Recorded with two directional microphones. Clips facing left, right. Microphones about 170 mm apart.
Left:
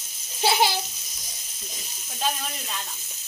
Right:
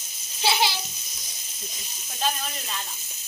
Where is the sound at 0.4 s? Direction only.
50° left (ahead or behind).